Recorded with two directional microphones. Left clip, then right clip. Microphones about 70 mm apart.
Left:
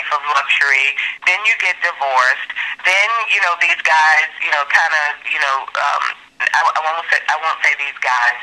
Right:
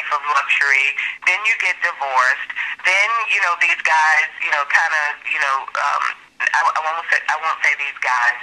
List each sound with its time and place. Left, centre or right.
0.1 s speech: left